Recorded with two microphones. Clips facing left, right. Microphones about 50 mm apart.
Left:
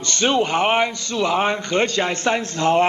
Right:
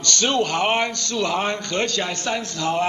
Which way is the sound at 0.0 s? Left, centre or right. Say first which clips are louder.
Left 2 dB; centre.